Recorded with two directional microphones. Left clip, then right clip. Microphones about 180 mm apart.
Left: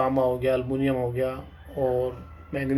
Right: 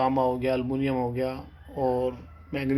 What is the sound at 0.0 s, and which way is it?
Speech, 30° right (ahead or behind).